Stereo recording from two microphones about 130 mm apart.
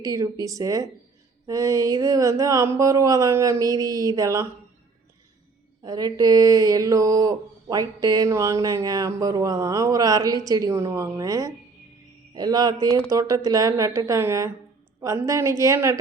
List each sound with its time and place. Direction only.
0.0 s speech: 25° right (ahead or behind)
5.8 s speech: 30° right (ahead or behind)